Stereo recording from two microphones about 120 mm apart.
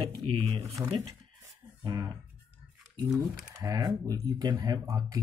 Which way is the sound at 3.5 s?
30° right (ahead or behind).